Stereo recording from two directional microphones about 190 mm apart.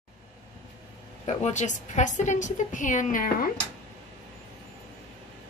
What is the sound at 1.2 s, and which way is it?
A woman's voice, 40° left (ahead or behind).